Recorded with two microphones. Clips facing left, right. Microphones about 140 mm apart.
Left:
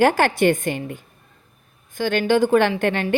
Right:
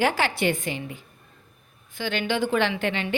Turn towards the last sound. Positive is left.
turn(degrees=50)  # may be behind; listen again after turning